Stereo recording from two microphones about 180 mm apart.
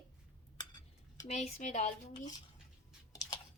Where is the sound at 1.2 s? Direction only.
40° left (ahead or behind).